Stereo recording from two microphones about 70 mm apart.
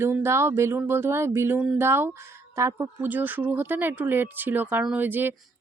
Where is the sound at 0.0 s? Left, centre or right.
Right.